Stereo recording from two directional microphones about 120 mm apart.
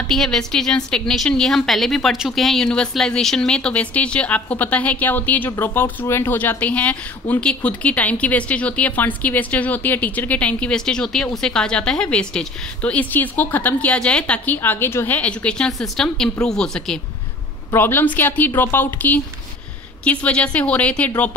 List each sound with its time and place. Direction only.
0.1 s a woman's voice: 5° left (ahead or behind)
17.7 s a woman's voice: 15° left (ahead or behind)